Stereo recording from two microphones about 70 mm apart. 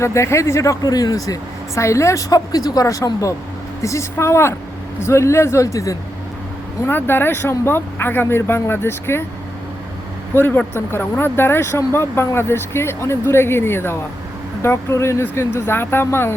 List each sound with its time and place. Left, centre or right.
0.0 s speech: left
0.8 s speech: left
3.8 s speech: left
6.8 s speech: left
10.3 s speech: left